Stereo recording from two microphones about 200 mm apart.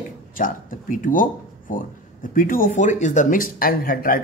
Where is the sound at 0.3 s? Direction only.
40° left (ahead or behind).